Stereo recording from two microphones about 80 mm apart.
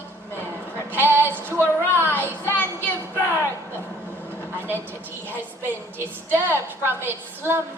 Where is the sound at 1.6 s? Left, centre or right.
Right.